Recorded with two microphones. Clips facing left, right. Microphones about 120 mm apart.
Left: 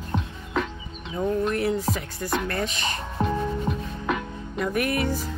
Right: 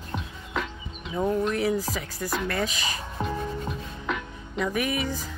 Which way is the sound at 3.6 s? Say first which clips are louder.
Left 4 dB; 10° left (ahead or behind).